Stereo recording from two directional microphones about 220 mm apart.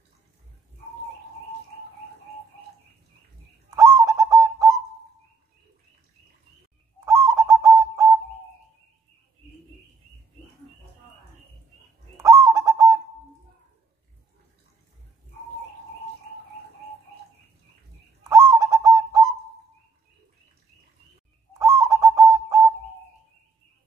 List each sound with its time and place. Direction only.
3.7 s bird: 15° right (ahead or behind)
7.1 s bird: 15° right (ahead or behind)
12.2 s bird: 15° right (ahead or behind)
18.3 s bird: 15° right (ahead or behind)
21.5 s bird: 15° right (ahead or behind)